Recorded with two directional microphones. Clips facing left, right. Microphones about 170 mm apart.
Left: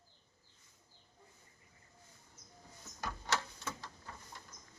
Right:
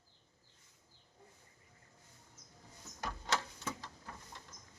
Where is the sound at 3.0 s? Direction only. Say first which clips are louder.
Even; 20° right (ahead or behind).